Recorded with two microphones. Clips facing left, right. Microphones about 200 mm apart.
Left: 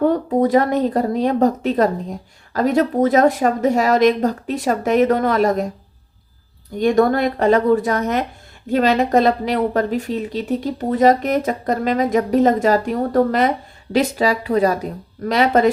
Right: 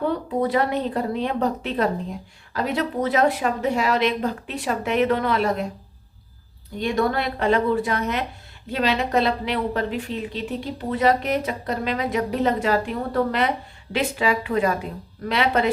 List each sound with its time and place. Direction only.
0.0 s speech: 45° left (ahead or behind)
6.7 s a woman's voice: 45° left (ahead or behind)